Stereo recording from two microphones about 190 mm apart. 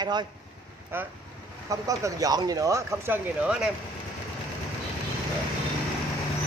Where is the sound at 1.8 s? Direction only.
20° right (ahead or behind).